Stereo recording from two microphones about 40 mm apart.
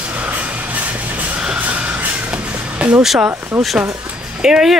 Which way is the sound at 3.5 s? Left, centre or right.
Right.